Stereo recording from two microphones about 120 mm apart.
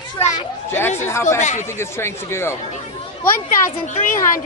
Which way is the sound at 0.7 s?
20° left (ahead or behind).